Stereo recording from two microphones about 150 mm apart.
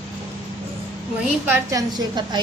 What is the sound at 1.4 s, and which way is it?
Speech, 15° right (ahead or behind).